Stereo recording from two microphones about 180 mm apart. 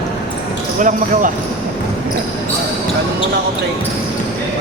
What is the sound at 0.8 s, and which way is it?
Speech, 45° right (ahead or behind).